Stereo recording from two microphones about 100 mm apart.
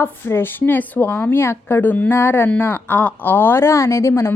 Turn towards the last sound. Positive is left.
turn(degrees=30)  # may be behind; listen again after turning